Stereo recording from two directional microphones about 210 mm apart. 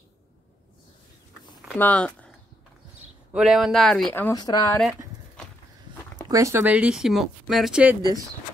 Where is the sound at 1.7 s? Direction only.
5° left (ahead or behind).